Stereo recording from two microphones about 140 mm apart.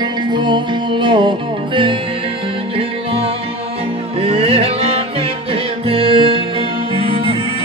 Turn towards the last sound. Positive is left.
turn(degrees=-40)  # may be behind; listen again after turning